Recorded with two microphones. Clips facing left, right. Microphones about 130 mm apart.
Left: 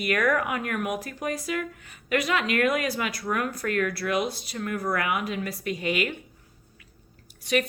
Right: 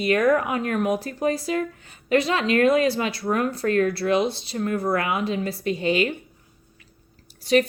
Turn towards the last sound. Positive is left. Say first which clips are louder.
# right 6 dB
turn(degrees=-30)  # may be behind; listen again after turning